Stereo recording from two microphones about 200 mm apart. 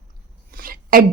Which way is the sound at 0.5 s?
45° right (ahead or behind).